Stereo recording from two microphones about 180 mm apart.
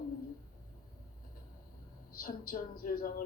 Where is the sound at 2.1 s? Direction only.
55° left (ahead or behind).